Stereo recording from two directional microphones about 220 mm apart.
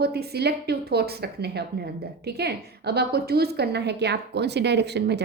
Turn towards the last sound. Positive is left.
turn(degrees=-50)  # may be behind; listen again after turning